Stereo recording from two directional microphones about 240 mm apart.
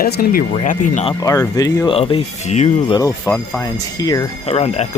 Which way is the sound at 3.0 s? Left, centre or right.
Centre.